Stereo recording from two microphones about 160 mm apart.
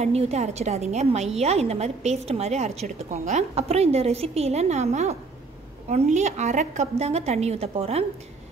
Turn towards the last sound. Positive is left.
turn(degrees=-40)  # may be behind; listen again after turning